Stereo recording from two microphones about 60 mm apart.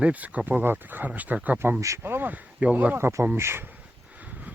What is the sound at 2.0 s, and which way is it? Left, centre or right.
Speech, right.